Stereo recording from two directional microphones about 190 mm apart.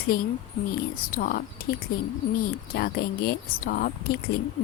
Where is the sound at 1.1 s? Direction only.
50° left (ahead or behind).